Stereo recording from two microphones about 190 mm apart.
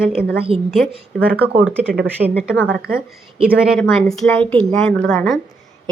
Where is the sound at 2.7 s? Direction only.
55° right (ahead or behind).